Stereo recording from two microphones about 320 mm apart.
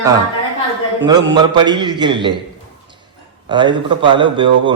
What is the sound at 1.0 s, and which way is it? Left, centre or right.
A man's voice, centre.